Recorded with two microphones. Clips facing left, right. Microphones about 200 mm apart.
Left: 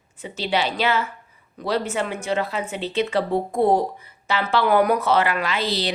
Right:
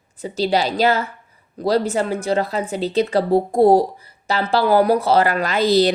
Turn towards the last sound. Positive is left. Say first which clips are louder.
# right 9 dB
turn(degrees=-40)  # may be behind; listen again after turning